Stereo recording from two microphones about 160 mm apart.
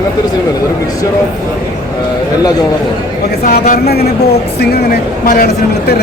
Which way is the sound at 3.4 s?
65° left (ahead or behind).